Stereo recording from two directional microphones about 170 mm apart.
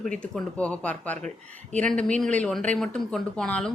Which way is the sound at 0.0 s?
5° left (ahead or behind).